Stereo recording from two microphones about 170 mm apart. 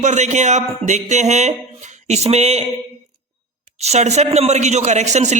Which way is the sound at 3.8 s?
40° right (ahead or behind).